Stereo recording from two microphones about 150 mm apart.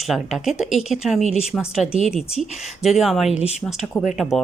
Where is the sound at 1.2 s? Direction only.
45° left (ahead or behind).